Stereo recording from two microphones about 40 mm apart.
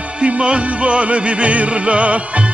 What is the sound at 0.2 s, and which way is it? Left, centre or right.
Music, right.